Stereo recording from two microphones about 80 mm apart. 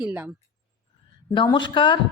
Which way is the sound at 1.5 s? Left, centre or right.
Left.